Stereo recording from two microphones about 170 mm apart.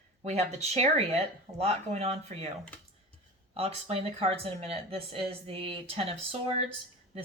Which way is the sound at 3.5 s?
35° right (ahead or behind).